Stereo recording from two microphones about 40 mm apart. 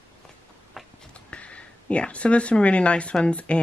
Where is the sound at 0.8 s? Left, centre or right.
Centre.